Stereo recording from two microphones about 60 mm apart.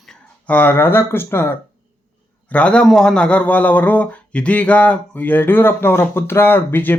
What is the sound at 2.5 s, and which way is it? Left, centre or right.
Speech, centre.